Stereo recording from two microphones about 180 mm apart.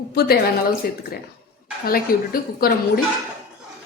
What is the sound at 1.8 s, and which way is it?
A woman's voice, 55° left (ahead or behind).